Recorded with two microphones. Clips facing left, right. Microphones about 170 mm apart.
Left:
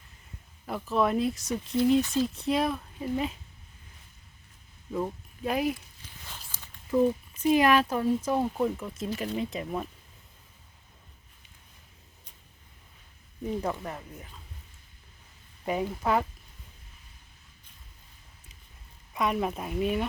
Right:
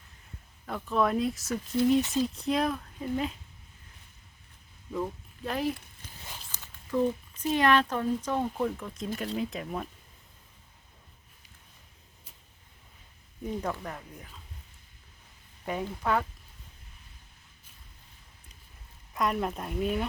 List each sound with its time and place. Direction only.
0.6 s speech: 5° left (ahead or behind)
2.0 s speech: 20° right (ahead or behind)
2.2 s speech: centre (ahead or behind)
5.5 s speech: 10° left (ahead or behind)
13.5 s speech: 5° left (ahead or behind)
15.6 s speech: 10° left (ahead or behind)
19.1 s speech: 5° left (ahead or behind)